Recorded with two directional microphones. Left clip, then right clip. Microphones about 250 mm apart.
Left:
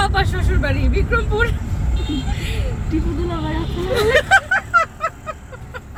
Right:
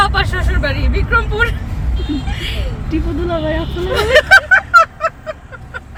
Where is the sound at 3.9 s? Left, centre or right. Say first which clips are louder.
Right 5 dB; centre.